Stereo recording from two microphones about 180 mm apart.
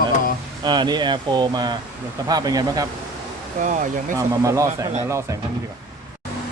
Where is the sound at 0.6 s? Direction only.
25° right (ahead or behind).